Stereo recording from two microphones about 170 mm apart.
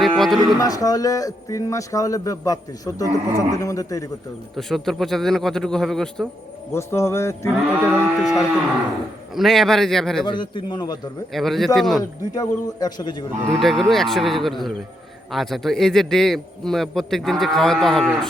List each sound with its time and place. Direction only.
0.0 s livestock: centre (ahead or behind)
0.6 s a man's voice: 20° left (ahead or behind)
4.5 s a man's voice: centre (ahead or behind)
6.7 s speech: 15° left (ahead or behind)
7.5 s moo: 5° right (ahead or behind)
9.3 s a man's voice: centre (ahead or behind)
10.2 s a man's voice: 30° left (ahead or behind)
11.3 s a man's voice: centre (ahead or behind)
12.3 s a man's voice: 20° left (ahead or behind)
13.6 s a man's voice: centre (ahead or behind)